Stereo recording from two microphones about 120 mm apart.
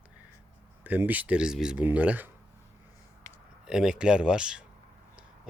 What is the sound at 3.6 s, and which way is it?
Speech, 5° right (ahead or behind).